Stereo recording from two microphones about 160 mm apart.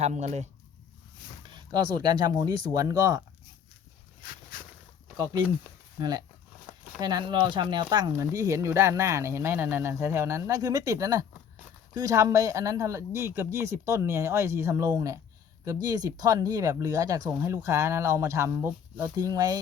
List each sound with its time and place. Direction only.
0.0 s speech: 45° right (ahead or behind)
1.5 s speech: 30° right (ahead or behind)
5.1 s speech: 25° right (ahead or behind)